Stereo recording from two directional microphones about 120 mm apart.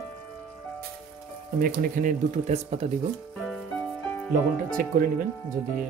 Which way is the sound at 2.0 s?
75° right (ahead or behind).